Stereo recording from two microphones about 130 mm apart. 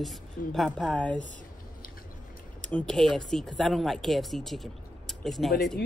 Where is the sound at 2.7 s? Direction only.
10° left (ahead or behind).